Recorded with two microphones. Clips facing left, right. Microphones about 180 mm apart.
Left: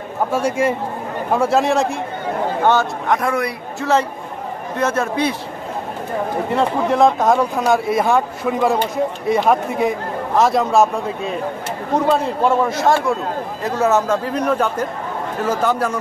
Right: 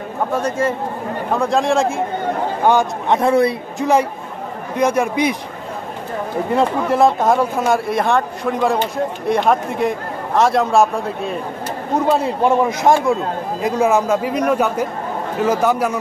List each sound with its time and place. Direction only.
0.3 s a man's voice: 10° left (ahead or behind)
2.6 s speech: 15° right (ahead or behind)
3.1 s a man's voice: 25° right (ahead or behind)
4.7 s speech: 15° right (ahead or behind)
6.9 s speech: centre (ahead or behind)
12.1 s speech: 15° right (ahead or behind)